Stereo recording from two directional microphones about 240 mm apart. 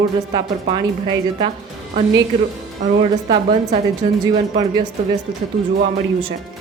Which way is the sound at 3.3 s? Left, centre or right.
Right.